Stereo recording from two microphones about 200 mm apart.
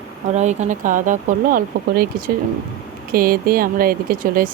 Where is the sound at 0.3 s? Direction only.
35° right (ahead or behind).